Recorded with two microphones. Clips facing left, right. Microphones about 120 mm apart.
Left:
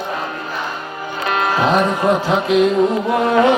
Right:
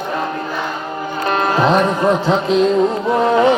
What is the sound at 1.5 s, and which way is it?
Music, 5° left (ahead or behind).